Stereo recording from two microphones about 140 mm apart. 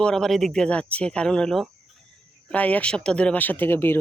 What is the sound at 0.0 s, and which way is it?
Speech, 5° left (ahead or behind).